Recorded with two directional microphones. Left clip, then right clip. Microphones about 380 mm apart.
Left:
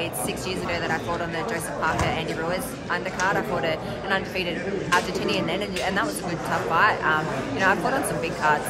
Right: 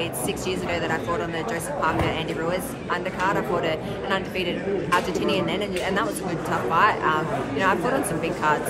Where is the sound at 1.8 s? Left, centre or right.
Centre.